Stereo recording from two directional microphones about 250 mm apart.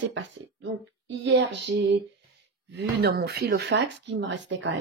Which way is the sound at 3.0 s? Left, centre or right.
Right.